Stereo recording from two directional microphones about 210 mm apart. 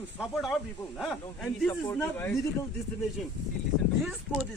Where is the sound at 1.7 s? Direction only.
10° left (ahead or behind).